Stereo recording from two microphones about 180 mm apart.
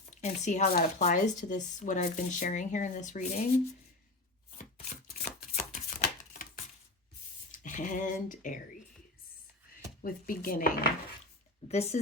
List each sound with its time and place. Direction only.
0.0 s speech: 40° left (ahead or behind)
4.5 s shuffling cards: 45° left (ahead or behind)
7.5 s speech: 45° left (ahead or behind)
10.0 s speech: 50° left (ahead or behind)
11.7 s speech: 35° left (ahead or behind)